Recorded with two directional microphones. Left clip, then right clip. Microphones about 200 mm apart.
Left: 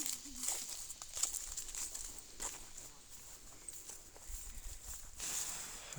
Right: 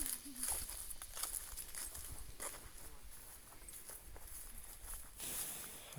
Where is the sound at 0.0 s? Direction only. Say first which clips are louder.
Left 5 dB; 25° left (ahead or behind).